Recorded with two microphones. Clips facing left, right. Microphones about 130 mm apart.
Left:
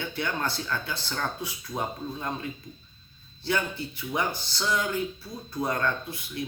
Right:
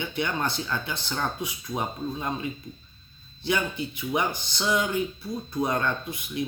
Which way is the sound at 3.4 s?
15° right (ahead or behind).